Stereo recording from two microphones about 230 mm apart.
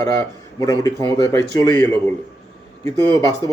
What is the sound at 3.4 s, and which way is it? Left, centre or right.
Speech, centre.